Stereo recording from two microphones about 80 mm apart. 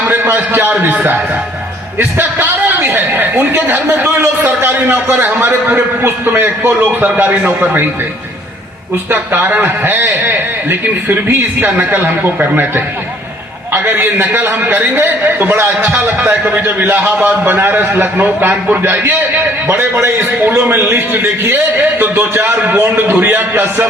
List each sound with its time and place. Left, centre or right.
0.1 s a sound: right
0.8 s a man's voice: right
9.0 s a man's voice: right
13.8 s a man's voice: right